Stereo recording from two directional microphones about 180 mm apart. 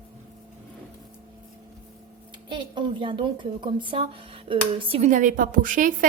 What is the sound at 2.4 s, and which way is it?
Speech, 25° right (ahead or behind).